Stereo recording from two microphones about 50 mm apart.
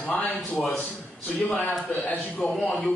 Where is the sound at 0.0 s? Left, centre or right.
Left.